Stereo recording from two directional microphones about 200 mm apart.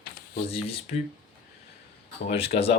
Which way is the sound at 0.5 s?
30° left (ahead or behind).